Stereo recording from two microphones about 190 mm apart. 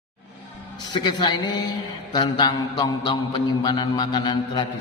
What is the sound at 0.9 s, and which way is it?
A man's voice, 25° left (ahead or behind).